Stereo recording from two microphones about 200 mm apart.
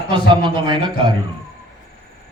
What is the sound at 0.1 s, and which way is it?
Speech, 25° right (ahead or behind).